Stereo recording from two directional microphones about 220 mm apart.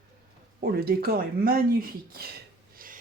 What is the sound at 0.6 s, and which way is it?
Speech, 45° right (ahead or behind).